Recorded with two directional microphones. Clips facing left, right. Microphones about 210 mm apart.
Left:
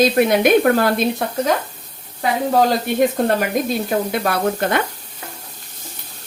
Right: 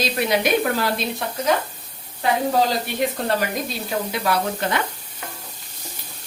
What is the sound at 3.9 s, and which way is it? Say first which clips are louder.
Speech: left 4 dB; 50° left (ahead or behind).